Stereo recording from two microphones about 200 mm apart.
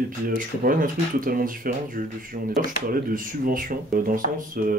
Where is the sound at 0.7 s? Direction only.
45° right (ahead or behind).